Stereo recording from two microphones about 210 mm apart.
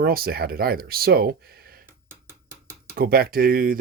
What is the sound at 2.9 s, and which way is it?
Speech, 45° right (ahead or behind).